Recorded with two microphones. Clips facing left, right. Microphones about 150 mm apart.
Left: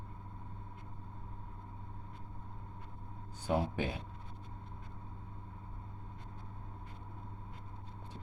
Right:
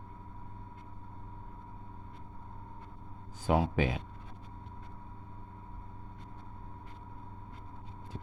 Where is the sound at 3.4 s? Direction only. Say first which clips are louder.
Right 5 dB; 90° right.